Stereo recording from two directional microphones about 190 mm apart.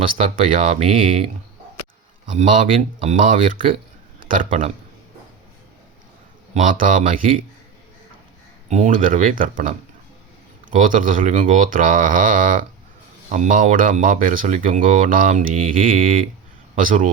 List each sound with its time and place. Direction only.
0.2 s speech: 35° right (ahead or behind)
2.3 s speech: 35° right (ahead or behind)
6.5 s speech: 45° right (ahead or behind)
8.7 s speech: 40° right (ahead or behind)